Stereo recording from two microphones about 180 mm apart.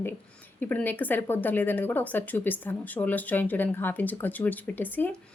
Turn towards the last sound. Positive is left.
turn(degrees=10)  # may be behind; listen again after turning